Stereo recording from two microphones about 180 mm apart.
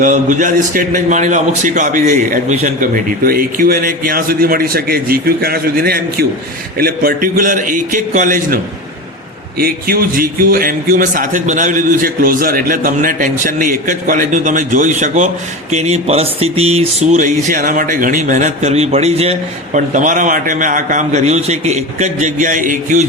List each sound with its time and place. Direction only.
0.0 s speech: 45° right (ahead or behind)
9.6 s speech: 55° right (ahead or behind)